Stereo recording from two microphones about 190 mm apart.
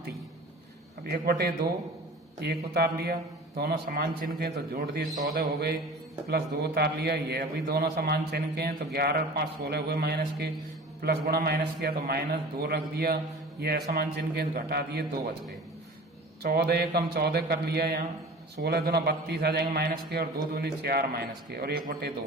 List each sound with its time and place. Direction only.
1.0 s a man's voice: 55° right (ahead or behind)
16.4 s a man's voice: 55° right (ahead or behind)